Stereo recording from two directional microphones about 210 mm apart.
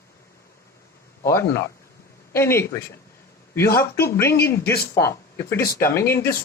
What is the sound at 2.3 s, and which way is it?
Speech, 10° left (ahead or behind).